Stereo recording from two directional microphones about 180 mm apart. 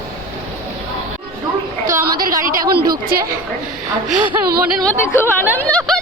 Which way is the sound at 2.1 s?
55° right (ahead or behind).